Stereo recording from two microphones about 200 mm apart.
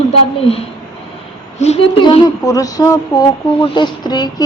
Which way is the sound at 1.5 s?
30° left (ahead or behind).